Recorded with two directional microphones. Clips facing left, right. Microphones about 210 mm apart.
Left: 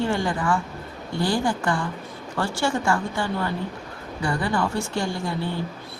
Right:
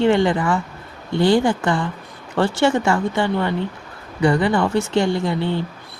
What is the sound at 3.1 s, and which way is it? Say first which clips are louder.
Speech: right 6 dB; 65° right (ahead or behind).